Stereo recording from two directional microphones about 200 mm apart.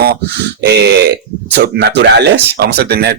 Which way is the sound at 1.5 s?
55° right (ahead or behind).